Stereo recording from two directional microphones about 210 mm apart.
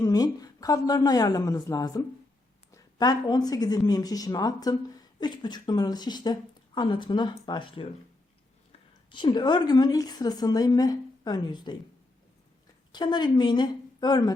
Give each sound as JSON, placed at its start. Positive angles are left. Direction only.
{"t": 0.0, "sound": "speech", "side_deg": 20}
{"t": 9.0, "sound": "speech", "side_deg": 20}
{"t": 12.9, "sound": "speech", "side_deg": 20}